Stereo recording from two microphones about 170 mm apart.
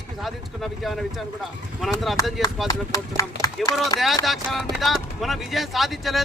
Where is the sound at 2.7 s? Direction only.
20° left (ahead or behind).